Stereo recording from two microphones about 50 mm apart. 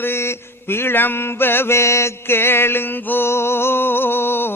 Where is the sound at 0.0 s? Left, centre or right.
Left.